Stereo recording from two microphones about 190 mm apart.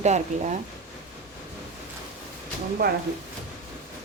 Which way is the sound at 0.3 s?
35° right (ahead or behind).